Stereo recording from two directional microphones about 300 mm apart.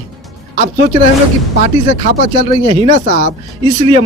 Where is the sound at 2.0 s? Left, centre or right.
Right.